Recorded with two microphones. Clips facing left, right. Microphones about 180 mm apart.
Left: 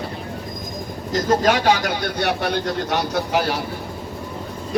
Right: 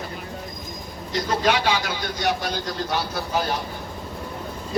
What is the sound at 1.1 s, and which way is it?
Speech, 45° left (ahead or behind).